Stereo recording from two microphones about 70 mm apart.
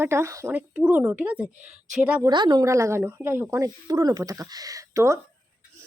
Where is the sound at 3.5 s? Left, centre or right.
Right.